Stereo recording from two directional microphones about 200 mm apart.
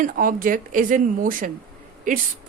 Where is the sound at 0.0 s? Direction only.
45° right (ahead or behind).